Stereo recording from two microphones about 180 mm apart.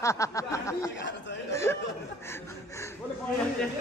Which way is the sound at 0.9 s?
80° left.